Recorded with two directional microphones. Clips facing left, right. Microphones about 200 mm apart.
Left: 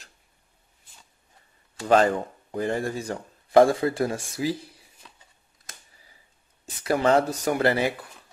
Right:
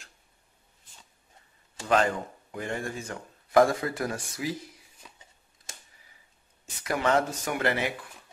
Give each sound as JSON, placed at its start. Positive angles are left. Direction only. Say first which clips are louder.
{"t": 1.9, "sound": "speech", "louder": "left 5 dB", "side_deg": 35}
{"t": 5.0, "sound": "a sound", "louder": "even", "side_deg": -10}
{"t": 6.6, "sound": "speech", "louder": "left 5 dB", "side_deg": 35}